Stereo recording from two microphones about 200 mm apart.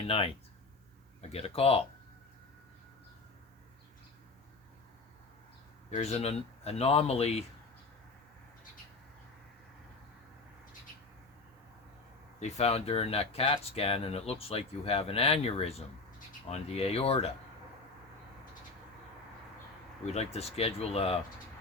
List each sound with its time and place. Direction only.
0.1 s speech: 30° left (ahead or behind)
5.9 s speech: 30° left (ahead or behind)
12.4 s speech: 35° left (ahead or behind)
20.1 s speech: 30° left (ahead or behind)